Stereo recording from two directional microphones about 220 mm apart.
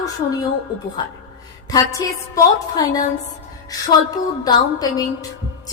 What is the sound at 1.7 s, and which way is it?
A woman's voice, 15° left (ahead or behind).